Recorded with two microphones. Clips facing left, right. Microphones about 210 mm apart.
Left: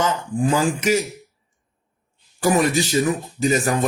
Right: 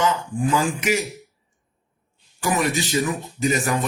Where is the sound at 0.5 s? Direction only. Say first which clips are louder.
Left 3 dB; 35° left (ahead or behind).